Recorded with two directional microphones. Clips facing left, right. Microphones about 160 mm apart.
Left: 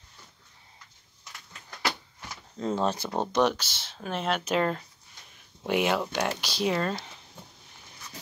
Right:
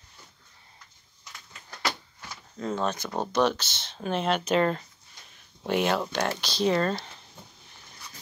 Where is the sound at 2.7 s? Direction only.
30° left (ahead or behind).